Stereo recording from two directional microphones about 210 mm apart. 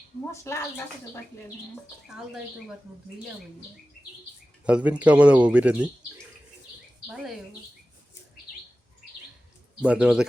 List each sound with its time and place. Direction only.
0.3 s a woman's voice: 10° left (ahead or behind)
2.0 s speech: centre (ahead or behind)
4.6 s speech: 5° right (ahead or behind)
9.8 s speech: 5° right (ahead or behind)